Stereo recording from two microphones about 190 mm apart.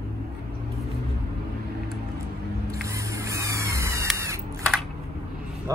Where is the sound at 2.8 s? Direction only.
15° right (ahead or behind).